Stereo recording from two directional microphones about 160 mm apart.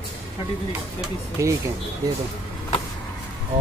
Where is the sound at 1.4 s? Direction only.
20° right (ahead or behind).